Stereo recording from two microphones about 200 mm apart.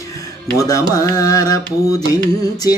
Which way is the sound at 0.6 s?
15° left (ahead or behind).